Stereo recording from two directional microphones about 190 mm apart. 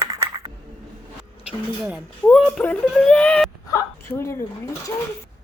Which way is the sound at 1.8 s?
5° right (ahead or behind).